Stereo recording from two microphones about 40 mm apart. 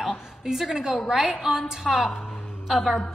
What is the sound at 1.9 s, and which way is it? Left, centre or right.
Speech, centre.